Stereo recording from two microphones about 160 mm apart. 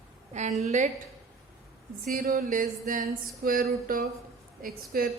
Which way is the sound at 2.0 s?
70° right (ahead or behind).